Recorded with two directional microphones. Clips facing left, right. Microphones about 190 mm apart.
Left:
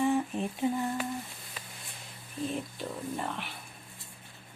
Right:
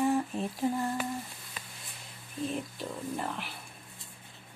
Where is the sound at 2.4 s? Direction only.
Centre (ahead or behind).